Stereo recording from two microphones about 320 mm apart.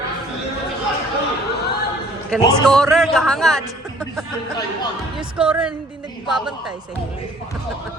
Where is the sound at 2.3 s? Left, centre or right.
Centre.